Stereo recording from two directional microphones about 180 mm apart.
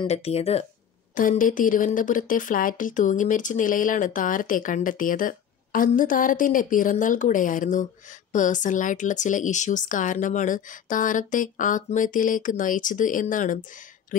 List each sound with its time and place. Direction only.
0.0 s speech: 35° left (ahead or behind)
1.1 s a woman's voice: 50° left (ahead or behind)